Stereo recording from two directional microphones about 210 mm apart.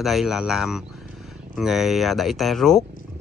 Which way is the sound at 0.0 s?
Centre (ahead or behind).